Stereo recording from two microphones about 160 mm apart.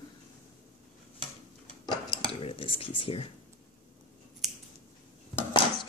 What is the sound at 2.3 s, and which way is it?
Dishes, 35° left (ahead or behind).